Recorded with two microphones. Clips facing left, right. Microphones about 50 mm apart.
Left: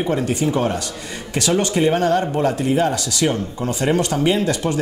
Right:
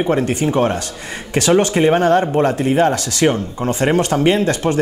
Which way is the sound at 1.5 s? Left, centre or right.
Right.